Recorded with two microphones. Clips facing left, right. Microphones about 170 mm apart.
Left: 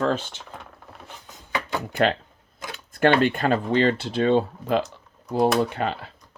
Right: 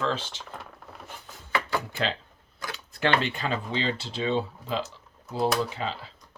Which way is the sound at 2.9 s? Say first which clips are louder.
Left 7 dB; 55° left (ahead or behind).